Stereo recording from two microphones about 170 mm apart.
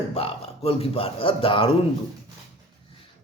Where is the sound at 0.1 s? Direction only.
35° left (ahead or behind).